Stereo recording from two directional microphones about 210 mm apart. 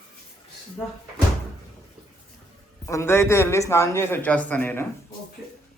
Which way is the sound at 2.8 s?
10° left (ahead or behind).